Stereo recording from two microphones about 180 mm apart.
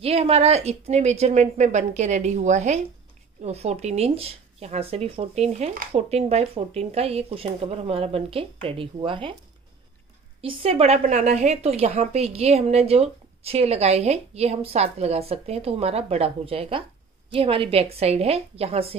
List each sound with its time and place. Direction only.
0.0 s a woman's voice: 35° right (ahead or behind)
10.4 s a woman's voice: 30° right (ahead or behind)